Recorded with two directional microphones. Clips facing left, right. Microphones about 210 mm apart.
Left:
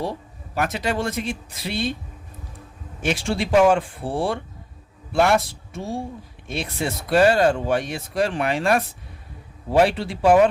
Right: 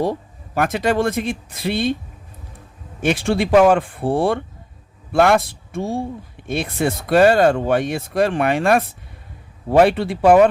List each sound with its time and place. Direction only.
0.5 s speech: 50° right (ahead or behind)
3.0 s speech: 55° right (ahead or behind)